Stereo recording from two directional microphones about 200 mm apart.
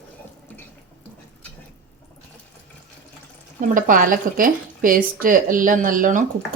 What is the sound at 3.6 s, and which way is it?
Speech, 45° right (ahead or behind).